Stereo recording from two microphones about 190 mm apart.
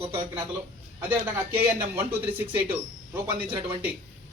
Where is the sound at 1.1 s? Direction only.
10° right (ahead or behind).